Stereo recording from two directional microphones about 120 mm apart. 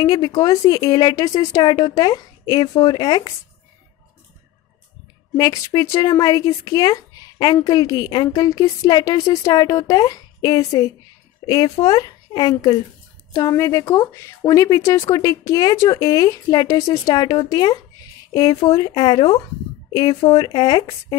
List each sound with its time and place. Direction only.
0.0 s speech: 30° left (ahead or behind)
5.3 s speech: 30° left (ahead or behind)